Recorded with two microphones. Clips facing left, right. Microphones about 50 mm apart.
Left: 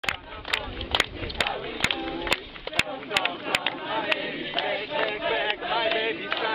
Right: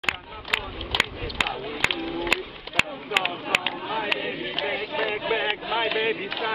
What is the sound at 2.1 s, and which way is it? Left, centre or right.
Music, centre.